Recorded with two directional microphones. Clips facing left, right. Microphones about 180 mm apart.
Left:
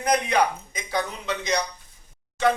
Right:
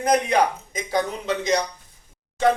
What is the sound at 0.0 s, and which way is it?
Speech, 45° right (ahead or behind).